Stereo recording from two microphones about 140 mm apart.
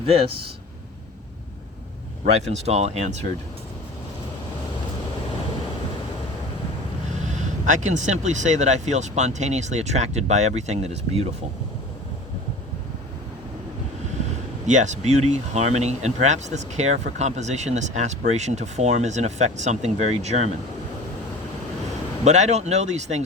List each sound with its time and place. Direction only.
0.0 s speech: 45° right (ahead or behind)
2.2 s speech: 50° right (ahead or behind)
7.1 s speech: 60° right (ahead or behind)
14.7 s speech: 60° right (ahead or behind)
22.2 s speech: 55° right (ahead or behind)